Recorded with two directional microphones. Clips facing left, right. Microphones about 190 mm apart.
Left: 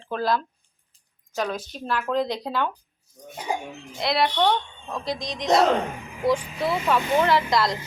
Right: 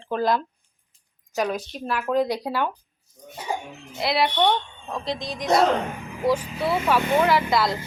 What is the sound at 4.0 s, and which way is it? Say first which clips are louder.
Speech: right 1 dB; 5° right (ahead or behind).